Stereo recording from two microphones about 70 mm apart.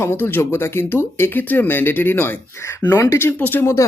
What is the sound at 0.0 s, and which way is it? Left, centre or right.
Speech, left.